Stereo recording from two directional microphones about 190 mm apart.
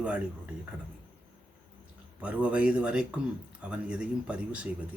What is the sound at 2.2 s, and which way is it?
Speech, 5° right (ahead or behind).